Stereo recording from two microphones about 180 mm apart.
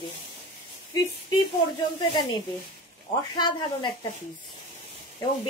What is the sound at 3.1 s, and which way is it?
Speech, 25° left (ahead or behind).